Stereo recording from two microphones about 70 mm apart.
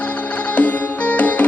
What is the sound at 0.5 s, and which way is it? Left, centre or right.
Music, left.